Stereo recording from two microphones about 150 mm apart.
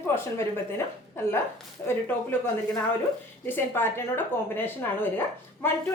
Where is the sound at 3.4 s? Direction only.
15° left (ahead or behind).